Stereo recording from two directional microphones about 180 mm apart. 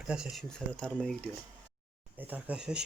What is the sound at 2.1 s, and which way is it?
Speech, 10° right (ahead or behind).